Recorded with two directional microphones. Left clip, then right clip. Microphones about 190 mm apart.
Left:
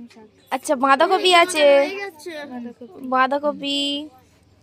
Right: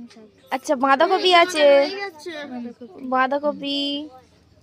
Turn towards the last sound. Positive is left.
turn(degrees=0)  # may be behind; listen again after turning